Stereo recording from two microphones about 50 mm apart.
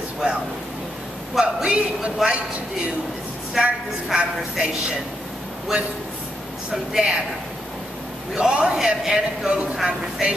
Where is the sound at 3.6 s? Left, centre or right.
Centre.